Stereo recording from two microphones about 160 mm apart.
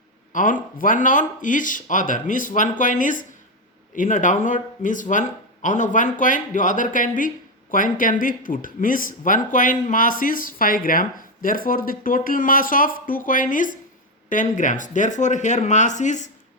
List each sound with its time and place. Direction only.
0.3 s speech: 55° left (ahead or behind)